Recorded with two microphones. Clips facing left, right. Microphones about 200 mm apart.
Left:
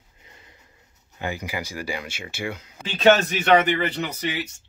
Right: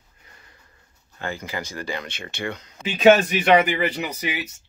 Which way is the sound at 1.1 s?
15° left (ahead or behind).